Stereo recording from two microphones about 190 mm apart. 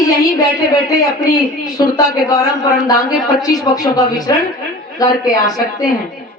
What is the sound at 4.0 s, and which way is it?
A man's voice, 20° left (ahead or behind).